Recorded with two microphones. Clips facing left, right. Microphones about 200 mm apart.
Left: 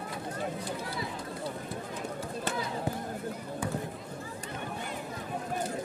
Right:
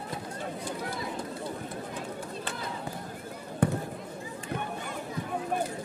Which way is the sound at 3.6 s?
60° right (ahead or behind).